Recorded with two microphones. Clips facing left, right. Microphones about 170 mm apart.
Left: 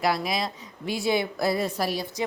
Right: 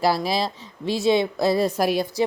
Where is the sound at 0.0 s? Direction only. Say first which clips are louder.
Right 4 dB; 30° right (ahead or behind).